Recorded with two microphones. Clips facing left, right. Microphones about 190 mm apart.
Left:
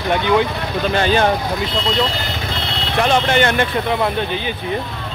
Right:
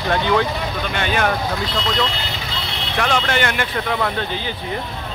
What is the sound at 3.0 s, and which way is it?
Speech, 25° left (ahead or behind).